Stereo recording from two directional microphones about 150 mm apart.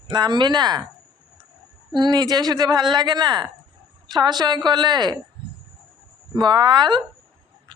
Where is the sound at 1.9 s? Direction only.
30° right (ahead or behind).